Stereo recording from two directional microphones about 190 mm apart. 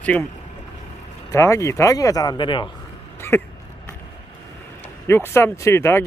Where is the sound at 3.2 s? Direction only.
10° left (ahead or behind).